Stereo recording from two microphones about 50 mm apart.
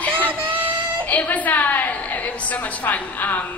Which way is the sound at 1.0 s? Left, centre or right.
Left.